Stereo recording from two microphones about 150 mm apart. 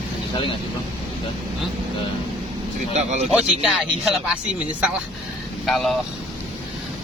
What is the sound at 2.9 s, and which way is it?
Speech, 50° right (ahead or behind).